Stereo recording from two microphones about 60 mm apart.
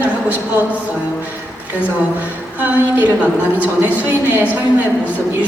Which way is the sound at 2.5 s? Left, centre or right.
Right.